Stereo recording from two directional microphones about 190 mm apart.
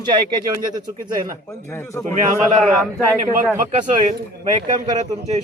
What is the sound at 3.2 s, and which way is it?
Speech, 45° right (ahead or behind).